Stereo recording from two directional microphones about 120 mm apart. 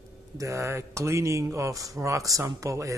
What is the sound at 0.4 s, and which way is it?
Speech, 25° right (ahead or behind).